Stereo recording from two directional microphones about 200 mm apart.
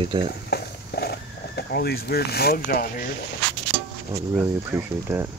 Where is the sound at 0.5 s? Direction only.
55° left (ahead or behind).